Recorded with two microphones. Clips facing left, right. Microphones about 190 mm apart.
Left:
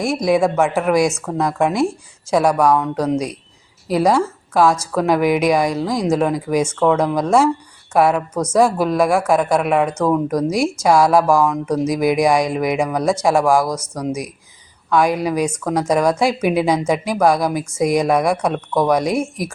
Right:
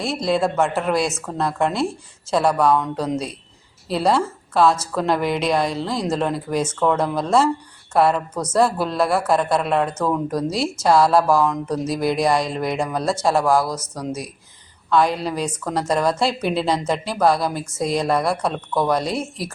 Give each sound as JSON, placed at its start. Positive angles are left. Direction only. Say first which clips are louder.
{"t": 0.0, "sound": "a woman's voice", "louder": "left 4 dB", "side_deg": 15}
{"t": 14.9, "sound": "speech", "louder": "left 3 dB", "side_deg": 15}